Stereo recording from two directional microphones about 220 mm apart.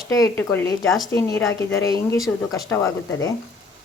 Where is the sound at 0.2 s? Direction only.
10° left (ahead or behind).